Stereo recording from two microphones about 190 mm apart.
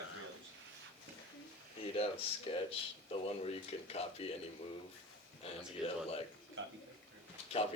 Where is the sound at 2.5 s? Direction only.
30° left (ahead or behind).